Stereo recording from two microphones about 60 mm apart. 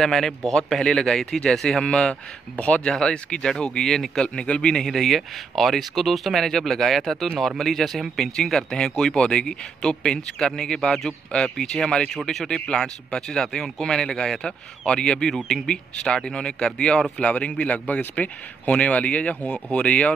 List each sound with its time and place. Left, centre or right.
0.0 s speech: centre
1.9 s speech: centre
4.8 s speech: centre; by 20.2 s left